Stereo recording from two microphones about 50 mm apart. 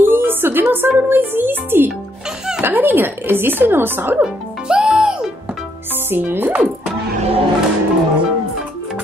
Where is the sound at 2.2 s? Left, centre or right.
Centre.